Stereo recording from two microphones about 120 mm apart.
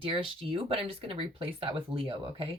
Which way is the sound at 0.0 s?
50° right (ahead or behind).